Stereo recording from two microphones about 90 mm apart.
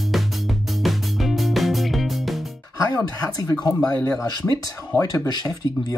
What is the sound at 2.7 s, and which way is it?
Speech, 40° left (ahead or behind).